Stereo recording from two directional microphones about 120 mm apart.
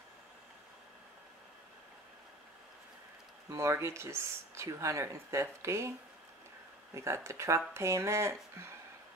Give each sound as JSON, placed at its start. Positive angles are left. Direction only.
{"t": 3.4, "sound": "speech", "side_deg": -25}